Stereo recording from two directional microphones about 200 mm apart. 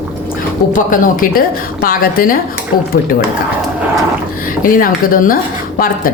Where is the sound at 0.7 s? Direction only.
40° left (ahead or behind).